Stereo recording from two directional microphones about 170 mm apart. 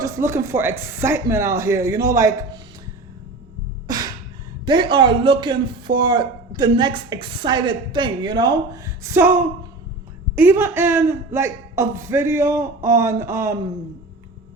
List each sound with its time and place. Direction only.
0.0 s a man's voice: 15° right (ahead or behind)
3.8 s a sound: 25° right (ahead or behind)
4.6 s a man's voice: 25° right (ahead or behind)